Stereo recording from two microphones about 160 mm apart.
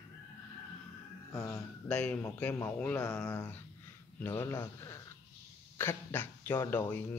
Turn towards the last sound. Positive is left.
turn(degrees=15)  # may be behind; listen again after turning